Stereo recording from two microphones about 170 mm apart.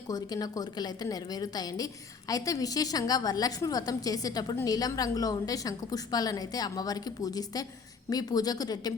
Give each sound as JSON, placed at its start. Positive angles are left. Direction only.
{"t": 0.1, "sound": "a woman's voice", "side_deg": 20}